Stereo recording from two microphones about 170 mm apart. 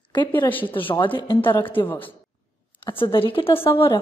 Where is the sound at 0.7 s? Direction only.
30° left (ahead or behind).